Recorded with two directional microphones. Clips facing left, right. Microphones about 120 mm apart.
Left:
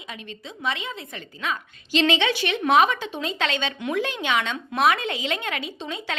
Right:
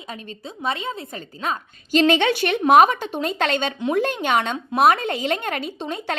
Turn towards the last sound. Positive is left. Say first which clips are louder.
# right 4 dB
turn(degrees=-50)  # may be behind; listen again after turning